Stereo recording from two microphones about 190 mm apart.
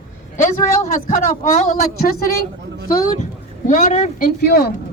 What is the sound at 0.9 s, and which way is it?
A man's voice, 45° left (ahead or behind).